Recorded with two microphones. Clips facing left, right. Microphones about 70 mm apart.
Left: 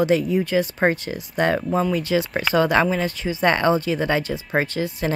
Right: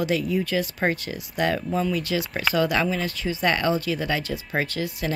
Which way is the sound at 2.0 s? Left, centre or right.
Left.